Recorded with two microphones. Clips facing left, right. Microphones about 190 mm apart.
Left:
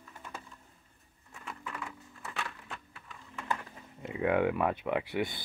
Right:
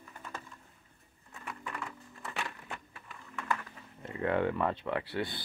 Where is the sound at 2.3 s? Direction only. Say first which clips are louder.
Right 1 dB; 10° right (ahead or behind).